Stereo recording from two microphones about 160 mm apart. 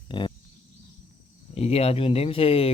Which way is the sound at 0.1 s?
30° left (ahead or behind).